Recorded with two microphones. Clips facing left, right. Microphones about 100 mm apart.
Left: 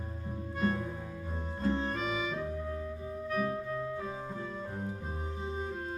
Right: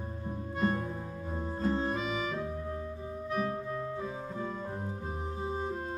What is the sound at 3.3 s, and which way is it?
Music, 25° right (ahead or behind).